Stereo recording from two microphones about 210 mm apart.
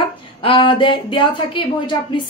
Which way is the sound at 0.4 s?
25° left (ahead or behind).